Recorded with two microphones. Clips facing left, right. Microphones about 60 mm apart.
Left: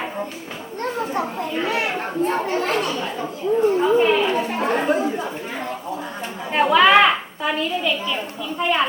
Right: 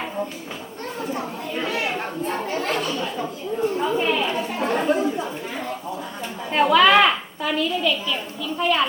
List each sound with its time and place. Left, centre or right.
1.6 s chatter: left
2.2 s speech: left
2.9 s a woman's voice: centre
4.4 s speech: left
4.8 s a woman's voice: centre
6.5 s a woman's voice: centre